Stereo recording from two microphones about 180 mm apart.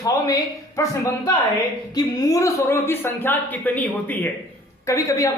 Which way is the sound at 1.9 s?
20° left (ahead or behind).